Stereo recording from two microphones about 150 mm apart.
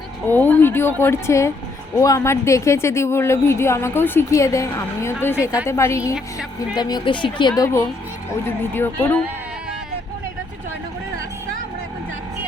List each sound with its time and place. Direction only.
0.3 s a woman's voice: 10° left (ahead or behind)